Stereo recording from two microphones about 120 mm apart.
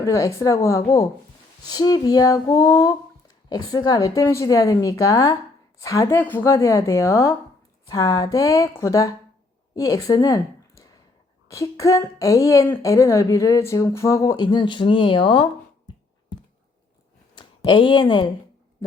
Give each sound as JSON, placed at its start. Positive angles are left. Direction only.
{"t": 0.0, "sound": "a woman's voice", "side_deg": 25}
{"t": 17.6, "sound": "speech", "side_deg": 40}